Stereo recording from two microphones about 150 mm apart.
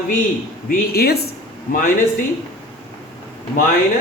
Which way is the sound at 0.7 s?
90° left.